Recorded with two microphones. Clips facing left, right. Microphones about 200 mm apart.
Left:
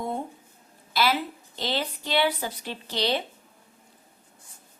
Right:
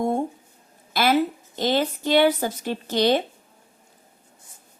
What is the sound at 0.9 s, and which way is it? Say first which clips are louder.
A woman's voice: right 5 dB; 50° right (ahead or behind).